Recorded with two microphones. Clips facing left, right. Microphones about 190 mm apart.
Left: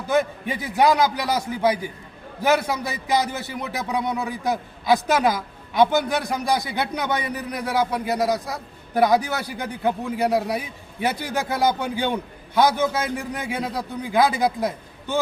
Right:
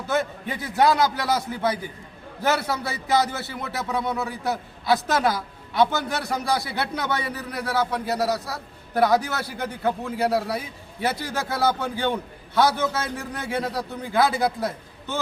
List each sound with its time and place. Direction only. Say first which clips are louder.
0.1 s a man's voice: left 4 dB; 15° left (ahead or behind)